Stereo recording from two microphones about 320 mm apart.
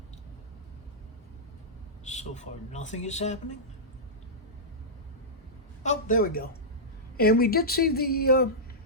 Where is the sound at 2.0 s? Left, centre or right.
Left.